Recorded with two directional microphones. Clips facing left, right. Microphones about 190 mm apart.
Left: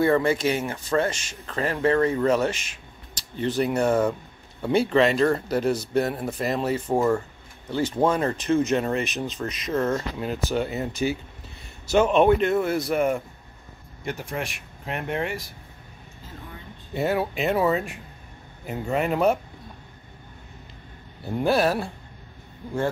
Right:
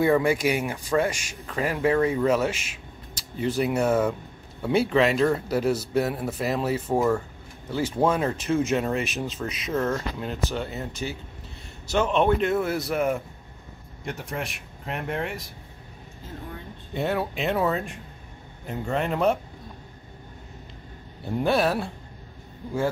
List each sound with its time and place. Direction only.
0.0 s a man's voice: 10° right (ahead or behind); by 12.3 s 10° left (ahead or behind)
12.4 s speech: centre (ahead or behind)
16.9 s speech: 5° left (ahead or behind)
21.4 s speech: centre (ahead or behind)